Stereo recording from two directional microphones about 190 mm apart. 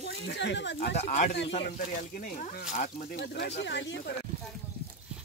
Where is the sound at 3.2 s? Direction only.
60° left (ahead or behind).